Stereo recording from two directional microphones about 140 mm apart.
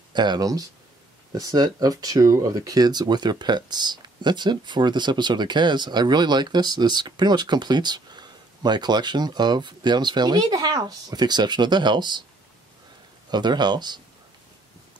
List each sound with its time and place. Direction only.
0.1 s speech: 30° right (ahead or behind)
13.3 s speech: 30° right (ahead or behind)